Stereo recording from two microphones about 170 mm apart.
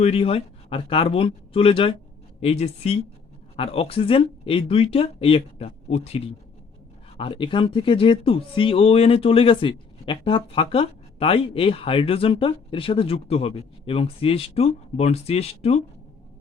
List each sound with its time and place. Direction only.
0.0 s speech: 35° left (ahead or behind)